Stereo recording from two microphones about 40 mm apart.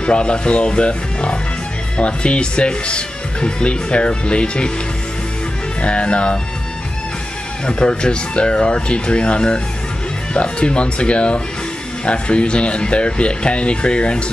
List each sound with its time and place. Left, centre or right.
0.0 s speech: left
5.8 s speech: left
7.6 s speech: left